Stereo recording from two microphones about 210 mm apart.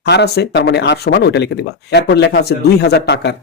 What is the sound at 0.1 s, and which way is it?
Speech, 55° left (ahead or behind).